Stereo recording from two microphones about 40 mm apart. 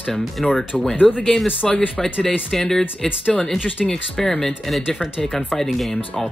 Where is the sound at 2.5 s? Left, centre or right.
Centre.